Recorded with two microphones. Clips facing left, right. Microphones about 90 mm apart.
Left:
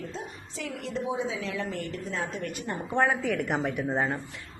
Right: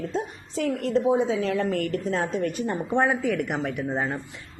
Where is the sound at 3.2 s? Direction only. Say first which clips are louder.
Right 2 dB; centre (ahead or behind).